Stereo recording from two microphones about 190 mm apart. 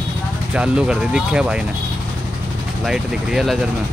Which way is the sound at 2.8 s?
Centre (ahead or behind).